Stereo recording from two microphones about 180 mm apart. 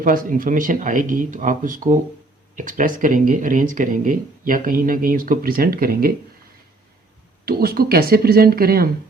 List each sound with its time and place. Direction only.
0.0 s speech: 50° right (ahead or behind)
7.4 s speech: 60° right (ahead or behind)